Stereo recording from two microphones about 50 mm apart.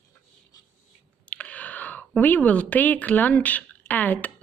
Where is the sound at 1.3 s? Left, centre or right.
Left.